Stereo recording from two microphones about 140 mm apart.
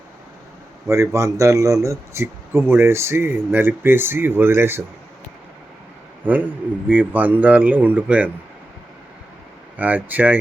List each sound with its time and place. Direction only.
0.9 s speech: 20° right (ahead or behind)
6.2 s speech: 10° right (ahead or behind)
9.7 s speech: 10° right (ahead or behind)